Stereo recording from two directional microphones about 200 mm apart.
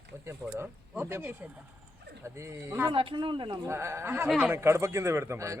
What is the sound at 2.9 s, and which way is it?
A man's voice, 25° right (ahead or behind).